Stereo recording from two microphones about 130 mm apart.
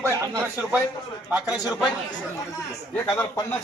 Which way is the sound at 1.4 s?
30° left (ahead or behind).